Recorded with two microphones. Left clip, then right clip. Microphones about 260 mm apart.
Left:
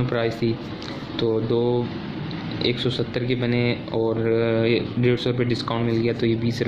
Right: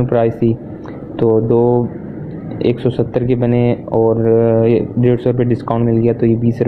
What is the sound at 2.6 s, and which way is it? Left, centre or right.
Speech, centre.